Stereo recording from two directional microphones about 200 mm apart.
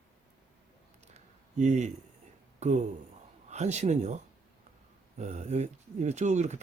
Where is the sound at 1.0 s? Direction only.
35° right (ahead or behind).